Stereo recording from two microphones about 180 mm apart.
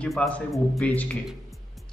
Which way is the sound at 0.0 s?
5° left (ahead or behind).